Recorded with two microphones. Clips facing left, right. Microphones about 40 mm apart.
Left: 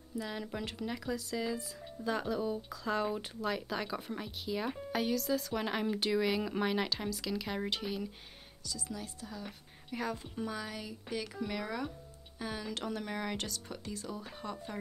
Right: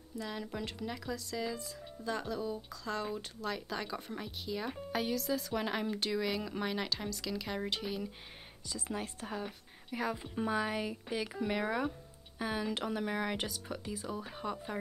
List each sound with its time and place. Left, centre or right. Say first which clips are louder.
0.2 s speech: even; centre
8.6 s speech: right 3 dB; right
9.5 s a sound: even; centre
10.3 s speech: right 6 dB; right